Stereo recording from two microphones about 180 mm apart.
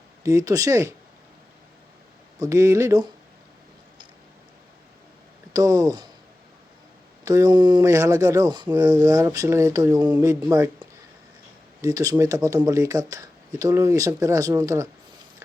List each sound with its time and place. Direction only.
0.2 s speech: 20° right (ahead or behind)
2.4 s speech: 15° right (ahead or behind)
5.5 s speech: 20° right (ahead or behind)
7.3 s speech: 20° right (ahead or behind)